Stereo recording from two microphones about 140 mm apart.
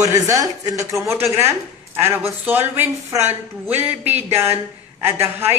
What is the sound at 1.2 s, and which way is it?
A woman's voice, 20° right (ahead or behind).